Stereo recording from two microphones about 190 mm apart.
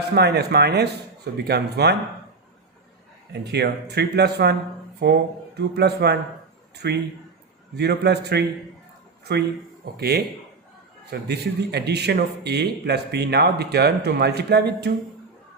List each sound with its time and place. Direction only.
0.1 s speech: 60° right (ahead or behind)
3.4 s speech: 60° right (ahead or behind)